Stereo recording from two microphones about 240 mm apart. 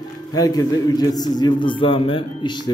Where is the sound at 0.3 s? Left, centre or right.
Centre.